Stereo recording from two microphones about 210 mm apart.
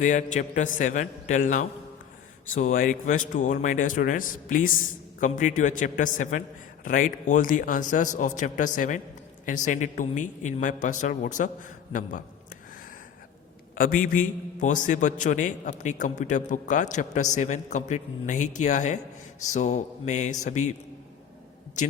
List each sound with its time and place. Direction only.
0.0 s a man's voice: 35° left (ahead or behind)
13.7 s a man's voice: 40° left (ahead or behind)
21.8 s a man's voice: 35° left (ahead or behind)